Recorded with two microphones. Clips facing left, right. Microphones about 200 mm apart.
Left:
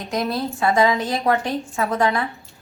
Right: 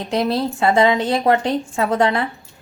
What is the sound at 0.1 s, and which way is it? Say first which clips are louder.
A woman's voice: right 4 dB; 30° right (ahead or behind).